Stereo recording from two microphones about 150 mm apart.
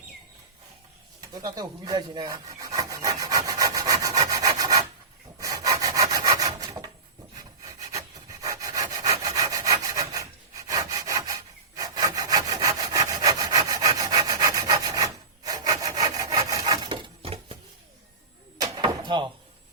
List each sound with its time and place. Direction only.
1.2 s rub: 25° right (ahead or behind)
5.4 s wood: 20° right (ahead or behind)
7.3 s rub: 25° right (ahead or behind); by 17.6 s 40° right (ahead or behind)
18.5 s door: 30° right (ahead or behind)